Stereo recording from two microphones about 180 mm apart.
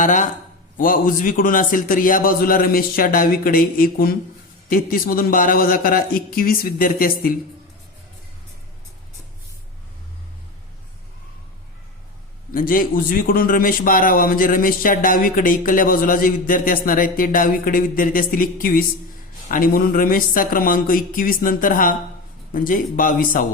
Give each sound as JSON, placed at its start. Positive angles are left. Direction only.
{"t": 0.0, "sound": "a man's voice", "side_deg": 45}
{"t": 12.5, "sound": "a man's voice", "side_deg": 50}